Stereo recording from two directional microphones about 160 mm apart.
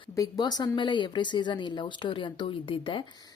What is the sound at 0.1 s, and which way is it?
Speech, 25° left (ahead or behind).